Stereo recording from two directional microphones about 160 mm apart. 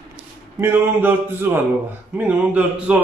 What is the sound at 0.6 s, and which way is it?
Speech, 15° right (ahead or behind).